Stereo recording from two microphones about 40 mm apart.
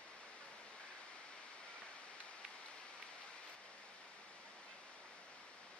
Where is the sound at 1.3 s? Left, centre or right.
Left.